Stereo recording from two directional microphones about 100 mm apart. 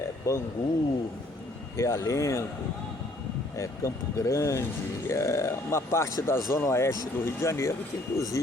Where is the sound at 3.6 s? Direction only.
30° left (ahead or behind).